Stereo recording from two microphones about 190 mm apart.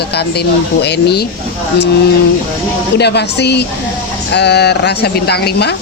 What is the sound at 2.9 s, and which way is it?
Speech, 60° left (ahead or behind).